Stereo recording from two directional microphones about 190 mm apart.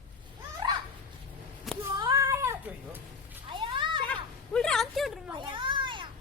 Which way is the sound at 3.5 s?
25° right (ahead or behind).